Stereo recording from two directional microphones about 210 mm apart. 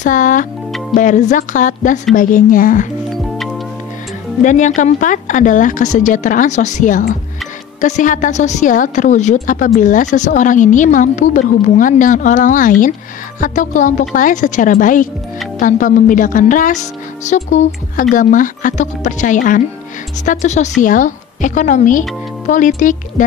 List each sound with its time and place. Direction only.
0.0 s a woman's voice: 35° left (ahead or behind)
3.3 s music: centre (ahead or behind)
4.4 s a woman's voice: 35° left (ahead or behind)